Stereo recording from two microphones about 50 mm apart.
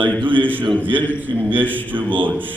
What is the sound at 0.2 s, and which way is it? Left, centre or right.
A man's voice, right.